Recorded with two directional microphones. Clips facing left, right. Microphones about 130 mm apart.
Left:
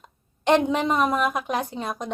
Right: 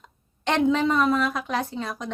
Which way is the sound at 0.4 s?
20° left (ahead or behind).